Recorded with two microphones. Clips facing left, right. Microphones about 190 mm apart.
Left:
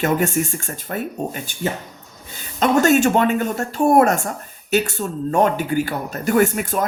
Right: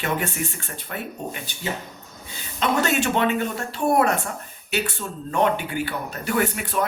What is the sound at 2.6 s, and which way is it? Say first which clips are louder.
Speech: left 7 dB; 45° left (ahead or behind).